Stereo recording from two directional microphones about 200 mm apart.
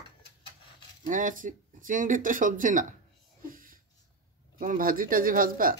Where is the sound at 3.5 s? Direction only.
45° right (ahead or behind).